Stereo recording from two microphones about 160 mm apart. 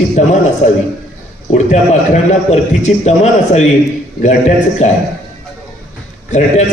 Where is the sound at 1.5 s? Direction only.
45° left (ahead or behind).